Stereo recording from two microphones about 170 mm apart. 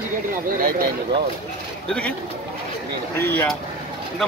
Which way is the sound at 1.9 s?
5° left (ahead or behind).